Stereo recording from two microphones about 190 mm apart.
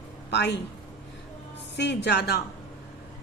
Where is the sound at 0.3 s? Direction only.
65° left (ahead or behind).